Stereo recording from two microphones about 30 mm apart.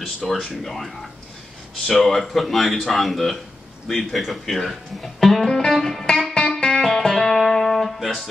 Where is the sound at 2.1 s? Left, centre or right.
Centre.